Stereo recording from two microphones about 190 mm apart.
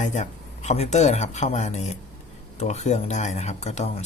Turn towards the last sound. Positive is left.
turn(degrees=35)  # may be behind; listen again after turning